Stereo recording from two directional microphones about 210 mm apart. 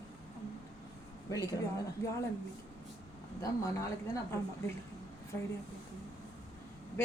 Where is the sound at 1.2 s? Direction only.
15° left (ahead or behind).